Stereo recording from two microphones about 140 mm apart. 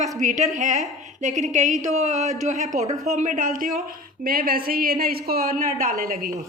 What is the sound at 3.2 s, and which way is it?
Speech, 70° right (ahead or behind).